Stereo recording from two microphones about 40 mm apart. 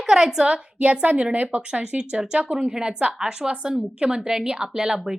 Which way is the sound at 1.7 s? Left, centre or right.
Right.